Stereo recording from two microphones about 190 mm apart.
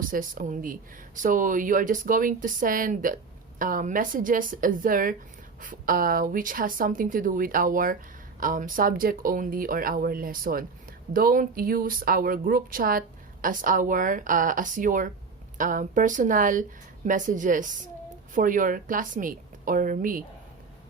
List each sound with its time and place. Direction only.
0.0 s speech: 45° right (ahead or behind)